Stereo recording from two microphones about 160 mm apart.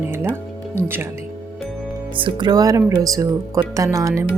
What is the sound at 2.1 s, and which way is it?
Speech, 30° right (ahead or behind).